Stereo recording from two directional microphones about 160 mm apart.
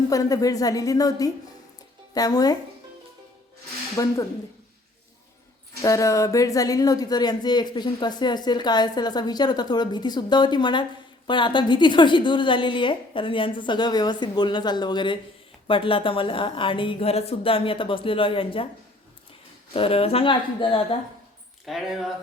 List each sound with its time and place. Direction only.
0.1 s speech: 20° left (ahead or behind)
4.0 s speech: 20° left (ahead or behind)
5.8 s a woman's voice: 20° left (ahead or behind)
19.7 s a woman's voice: 35° left (ahead or behind)
21.7 s speech: centre (ahead or behind)